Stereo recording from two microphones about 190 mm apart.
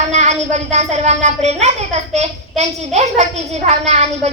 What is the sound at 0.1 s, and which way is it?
A woman's voice, 35° right (ahead or behind).